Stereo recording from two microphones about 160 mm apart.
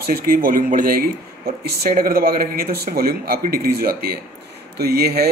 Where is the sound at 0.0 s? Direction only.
65° right (ahead or behind).